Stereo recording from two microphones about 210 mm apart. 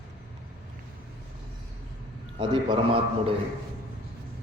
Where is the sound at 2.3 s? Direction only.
25° right (ahead or behind).